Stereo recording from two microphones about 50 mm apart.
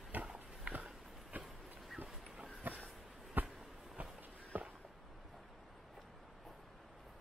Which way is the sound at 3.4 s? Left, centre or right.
Right.